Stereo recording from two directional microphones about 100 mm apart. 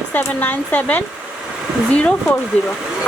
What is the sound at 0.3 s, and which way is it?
Speech, 15° left (ahead or behind).